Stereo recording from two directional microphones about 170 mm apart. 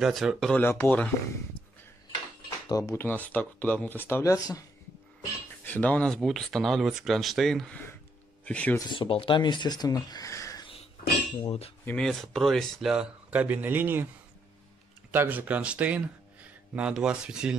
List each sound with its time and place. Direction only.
0.0 s speech: centre (ahead or behind)
2.7 s speech: 20° left (ahead or behind)
5.7 s speech: 10° left (ahead or behind)
8.7 s speech: 30° left (ahead or behind)
11.4 s cutlery: 35° left (ahead or behind)
11.8 s speech: 5° left (ahead or behind); by 14.0 s 10° right (ahead or behind)
15.0 s speech: 10° right (ahead or behind)